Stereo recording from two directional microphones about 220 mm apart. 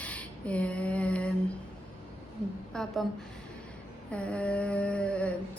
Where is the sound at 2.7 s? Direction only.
Centre (ahead or behind).